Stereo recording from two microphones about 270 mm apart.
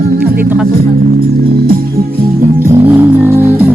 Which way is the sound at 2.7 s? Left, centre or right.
Centre.